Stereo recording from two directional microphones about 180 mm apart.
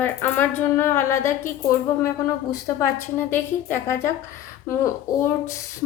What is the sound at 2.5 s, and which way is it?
A woman's voice, 15° left (ahead or behind).